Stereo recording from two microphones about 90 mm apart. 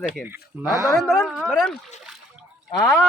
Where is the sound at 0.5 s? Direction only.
20° right (ahead or behind).